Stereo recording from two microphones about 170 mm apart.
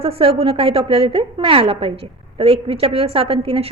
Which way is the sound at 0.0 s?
35° right (ahead or behind).